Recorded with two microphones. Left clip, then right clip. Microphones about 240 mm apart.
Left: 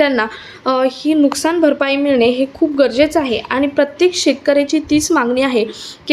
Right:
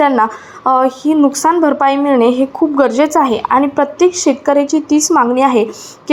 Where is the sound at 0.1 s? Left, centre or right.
Centre.